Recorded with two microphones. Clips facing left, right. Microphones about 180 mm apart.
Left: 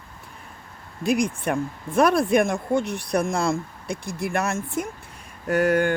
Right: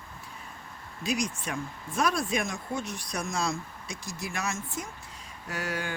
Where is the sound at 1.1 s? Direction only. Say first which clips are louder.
Left 9 dB; 55° left (ahead or behind).